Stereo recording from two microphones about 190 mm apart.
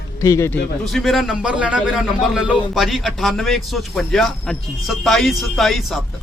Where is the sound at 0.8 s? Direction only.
Centre (ahead or behind).